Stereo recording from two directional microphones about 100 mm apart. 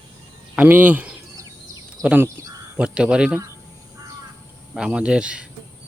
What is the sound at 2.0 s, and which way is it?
Speech, 30° right (ahead or behind).